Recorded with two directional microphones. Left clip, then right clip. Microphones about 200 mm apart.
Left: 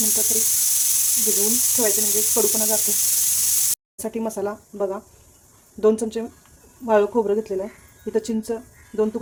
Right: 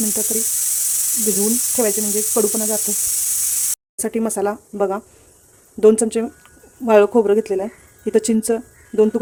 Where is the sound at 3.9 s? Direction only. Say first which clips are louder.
Right 10 dB; 30° right (ahead or behind).